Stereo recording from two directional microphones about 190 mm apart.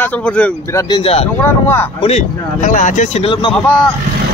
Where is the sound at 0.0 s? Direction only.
5° left (ahead or behind).